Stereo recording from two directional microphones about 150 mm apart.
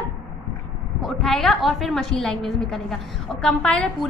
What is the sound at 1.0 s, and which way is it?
A woman's voice, 5° left (ahead or behind).